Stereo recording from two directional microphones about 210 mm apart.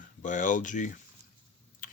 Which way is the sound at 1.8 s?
40° left (ahead or behind).